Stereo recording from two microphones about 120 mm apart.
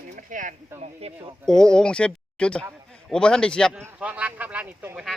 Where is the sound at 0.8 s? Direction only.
55° right (ahead or behind).